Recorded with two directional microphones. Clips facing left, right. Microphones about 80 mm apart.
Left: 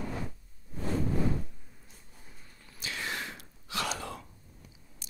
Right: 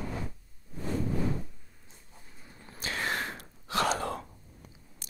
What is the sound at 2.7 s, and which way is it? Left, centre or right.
Gasp, right.